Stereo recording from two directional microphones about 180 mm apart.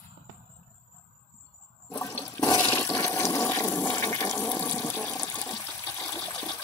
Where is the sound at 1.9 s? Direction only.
20° left (ahead or behind).